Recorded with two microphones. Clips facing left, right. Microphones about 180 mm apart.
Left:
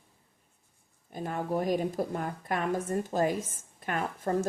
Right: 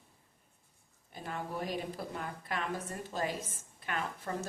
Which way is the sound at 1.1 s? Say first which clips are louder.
Left 8 dB; 45° left (ahead or behind).